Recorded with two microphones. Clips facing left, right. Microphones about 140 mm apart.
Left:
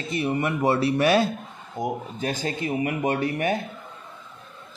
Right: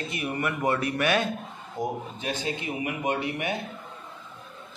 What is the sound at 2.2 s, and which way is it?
Speech, 40° left (ahead or behind).